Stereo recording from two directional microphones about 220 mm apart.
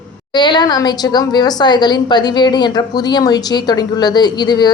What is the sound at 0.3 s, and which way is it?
A woman's voice, 20° left (ahead or behind).